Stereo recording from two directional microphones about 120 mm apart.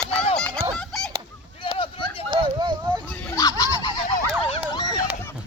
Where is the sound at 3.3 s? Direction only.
30° left (ahead or behind).